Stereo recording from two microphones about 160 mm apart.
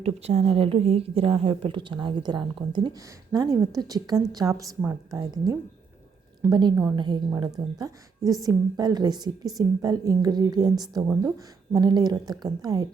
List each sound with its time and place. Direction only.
0.0 s a woman's voice: 40° right (ahead or behind); by 12.9 s 25° right (ahead or behind)